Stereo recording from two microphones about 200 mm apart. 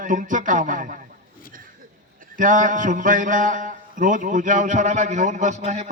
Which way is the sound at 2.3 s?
40° right (ahead or behind).